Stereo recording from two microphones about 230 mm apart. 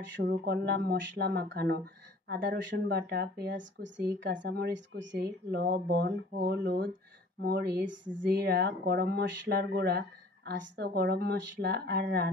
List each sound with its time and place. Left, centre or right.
0.1 s speech: right